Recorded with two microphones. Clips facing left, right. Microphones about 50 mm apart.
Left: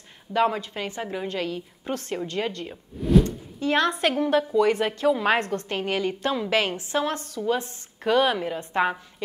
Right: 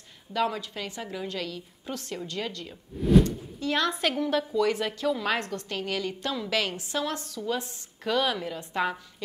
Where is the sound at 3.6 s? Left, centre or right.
Left.